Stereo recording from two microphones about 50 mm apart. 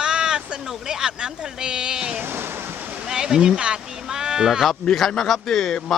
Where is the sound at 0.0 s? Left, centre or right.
Centre.